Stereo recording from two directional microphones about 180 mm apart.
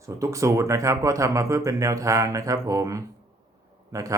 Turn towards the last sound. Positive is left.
turn(degrees=-20)  # may be behind; listen again after turning